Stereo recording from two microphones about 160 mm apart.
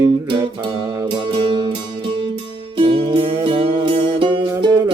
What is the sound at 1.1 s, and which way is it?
Music, 35° right (ahead or behind).